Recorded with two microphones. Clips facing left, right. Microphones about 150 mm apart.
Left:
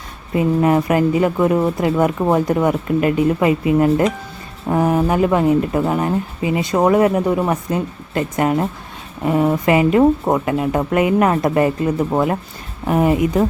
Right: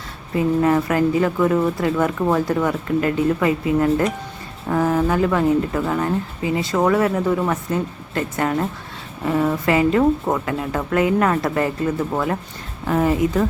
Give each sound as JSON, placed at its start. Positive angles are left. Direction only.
{"t": 0.3, "sound": "speech", "side_deg": 20}